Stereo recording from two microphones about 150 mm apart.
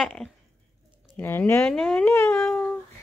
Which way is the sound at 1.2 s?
15° left (ahead or behind).